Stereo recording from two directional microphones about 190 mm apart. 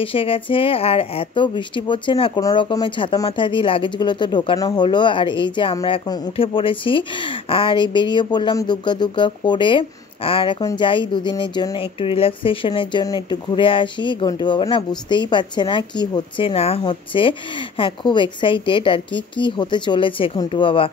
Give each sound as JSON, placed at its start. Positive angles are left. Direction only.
{"t": 0.0, "sound": "speech", "side_deg": 30}